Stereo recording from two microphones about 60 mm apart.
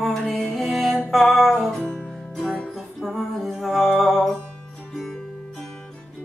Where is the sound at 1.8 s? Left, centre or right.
Centre.